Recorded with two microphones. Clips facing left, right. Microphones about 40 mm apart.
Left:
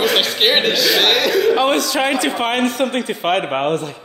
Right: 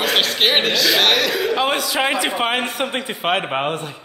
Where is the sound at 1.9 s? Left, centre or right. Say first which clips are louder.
Left 2 dB; centre.